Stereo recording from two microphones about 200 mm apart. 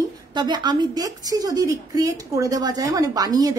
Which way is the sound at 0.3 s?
20° right (ahead or behind).